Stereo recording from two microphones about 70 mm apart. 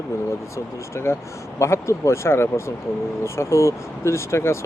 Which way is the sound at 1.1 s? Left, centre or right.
Left.